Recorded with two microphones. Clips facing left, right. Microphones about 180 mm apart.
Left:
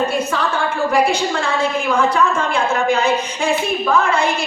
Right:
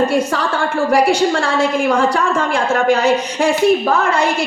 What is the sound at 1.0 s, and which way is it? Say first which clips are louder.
A woman's voice: right 4 dB; 80° right.